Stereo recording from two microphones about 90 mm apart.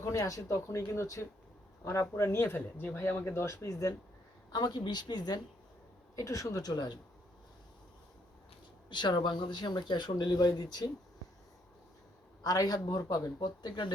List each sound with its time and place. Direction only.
0.0 s speech: 35° left (ahead or behind)
4.5 s speech: 50° left (ahead or behind)
6.1 s speech: 35° left (ahead or behind); by 7.0 s 50° left (ahead or behind)
8.9 s speech: 60° left (ahead or behind)
12.4 s speech: 45° left (ahead or behind)